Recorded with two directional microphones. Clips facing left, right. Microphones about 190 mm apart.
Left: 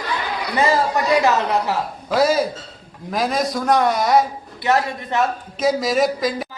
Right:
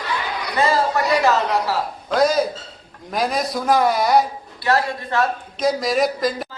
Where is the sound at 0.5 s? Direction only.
15° left (ahead or behind).